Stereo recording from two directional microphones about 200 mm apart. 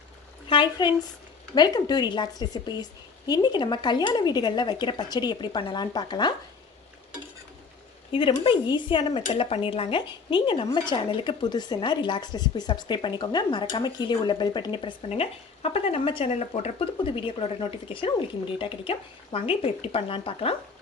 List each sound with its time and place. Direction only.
0.4 s speech: 25° left (ahead or behind)
8.1 s speech: 25° left (ahead or behind)